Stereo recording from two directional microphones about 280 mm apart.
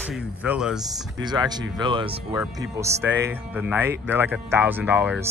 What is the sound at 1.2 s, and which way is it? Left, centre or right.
Speech, centre.